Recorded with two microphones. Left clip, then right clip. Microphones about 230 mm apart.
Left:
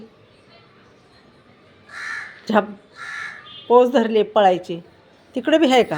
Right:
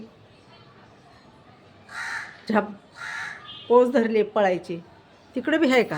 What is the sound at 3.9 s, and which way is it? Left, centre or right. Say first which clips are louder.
A woman's voice: left 5 dB; centre.